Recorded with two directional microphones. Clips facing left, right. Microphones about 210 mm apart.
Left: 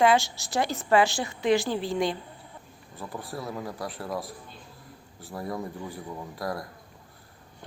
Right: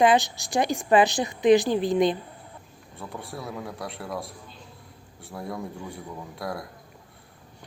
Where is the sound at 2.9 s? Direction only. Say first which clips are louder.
Left 1 dB; centre (ahead or behind).